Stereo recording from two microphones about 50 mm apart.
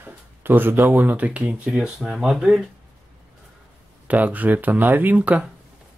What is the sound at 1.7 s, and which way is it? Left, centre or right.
Speech, centre.